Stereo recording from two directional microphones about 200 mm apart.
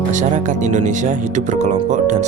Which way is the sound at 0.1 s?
40° right (ahead or behind).